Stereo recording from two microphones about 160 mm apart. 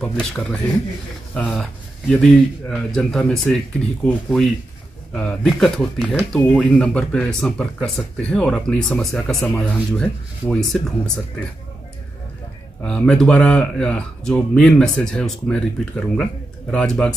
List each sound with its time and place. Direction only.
0.0 s speech: 5° left (ahead or behind)
10.4 s speech: 15° left (ahead or behind)
12.8 s speech: 5° left (ahead or behind)